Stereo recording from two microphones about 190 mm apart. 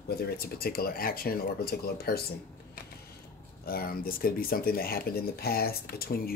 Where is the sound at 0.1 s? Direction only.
55° left (ahead or behind).